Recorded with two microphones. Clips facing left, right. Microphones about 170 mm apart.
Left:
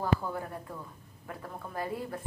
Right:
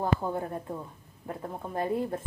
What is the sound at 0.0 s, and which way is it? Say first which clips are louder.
A woman's voice: right 2 dB; 25° right (ahead or behind).